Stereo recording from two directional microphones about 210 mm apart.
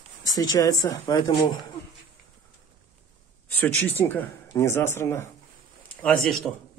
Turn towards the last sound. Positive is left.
turn(degrees=5)  # may be behind; listen again after turning